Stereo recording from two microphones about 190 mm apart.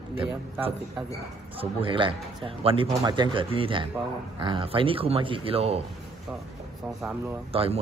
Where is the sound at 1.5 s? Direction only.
25° right (ahead or behind).